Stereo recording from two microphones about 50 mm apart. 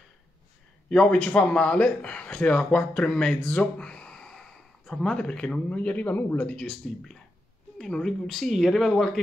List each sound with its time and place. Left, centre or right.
0.8 s a man's voice: centre
3.4 s a sound: left; by 5.1 s centre
5.1 s a man's voice: left
7.9 s speech: centre
8.5 s speech: centre